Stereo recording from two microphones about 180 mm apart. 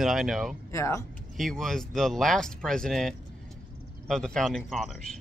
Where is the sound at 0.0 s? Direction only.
Centre (ahead or behind).